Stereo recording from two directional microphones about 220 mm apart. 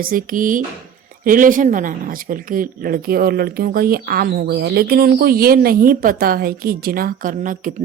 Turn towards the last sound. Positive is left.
turn(degrees=-35)  # may be behind; listen again after turning